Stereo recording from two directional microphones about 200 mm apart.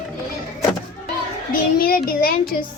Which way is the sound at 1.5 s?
45° left (ahead or behind).